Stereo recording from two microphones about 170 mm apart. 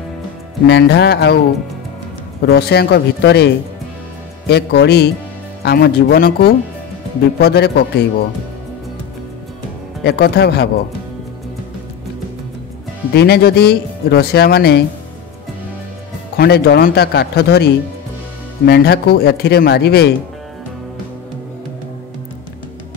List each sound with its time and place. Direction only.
0.7 s speech: 80° left
2.4 s speech: 70° left (ahead or behind)
4.5 s speech: 75° left (ahead or behind)
10.0 s speech: 75° left (ahead or behind)
13.1 s speech: 70° left (ahead or behind)
16.3 s speech: 70° left (ahead or behind)
18.7 s speech: 75° left (ahead or behind)